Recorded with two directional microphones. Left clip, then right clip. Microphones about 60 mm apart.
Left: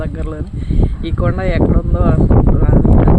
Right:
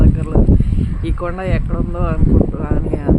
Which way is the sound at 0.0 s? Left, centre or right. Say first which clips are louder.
Right 3 dB; left.